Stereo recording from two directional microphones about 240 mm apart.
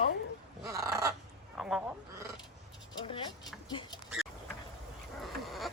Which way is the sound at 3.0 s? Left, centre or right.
Centre.